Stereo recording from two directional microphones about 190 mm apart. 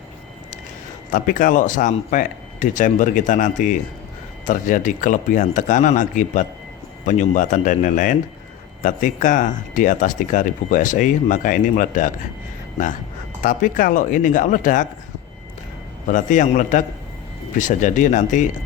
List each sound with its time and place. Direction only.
1.1 s a man's voice: 45° left (ahead or behind)
13.4 s speech: 45° left (ahead or behind)
16.0 s a man's voice: 40° left (ahead or behind)